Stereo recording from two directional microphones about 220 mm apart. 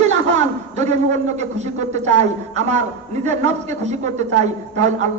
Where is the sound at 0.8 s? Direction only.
30° right (ahead or behind).